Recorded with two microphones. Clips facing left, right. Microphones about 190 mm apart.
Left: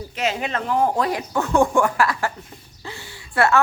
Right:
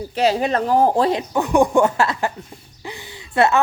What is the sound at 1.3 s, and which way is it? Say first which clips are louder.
A woman's voice: right 2 dB; 15° right (ahead or behind).